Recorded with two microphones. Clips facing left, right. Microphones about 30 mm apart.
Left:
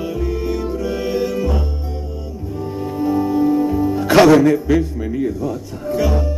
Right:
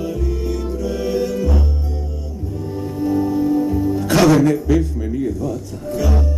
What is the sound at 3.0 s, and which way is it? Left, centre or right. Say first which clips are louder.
Music: left 1 dB; centre.